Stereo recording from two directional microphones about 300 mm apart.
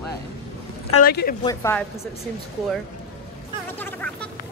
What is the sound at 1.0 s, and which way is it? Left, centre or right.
Speech, left.